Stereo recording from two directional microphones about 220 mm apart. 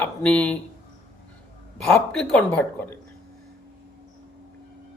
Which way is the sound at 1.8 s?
5° left (ahead or behind).